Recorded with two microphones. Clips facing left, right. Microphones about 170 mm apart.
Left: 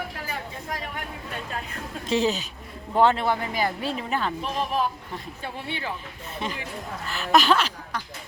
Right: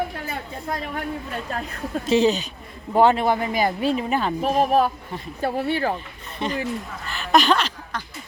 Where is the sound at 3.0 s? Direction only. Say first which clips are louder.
Right 3 dB; 15° right (ahead or behind).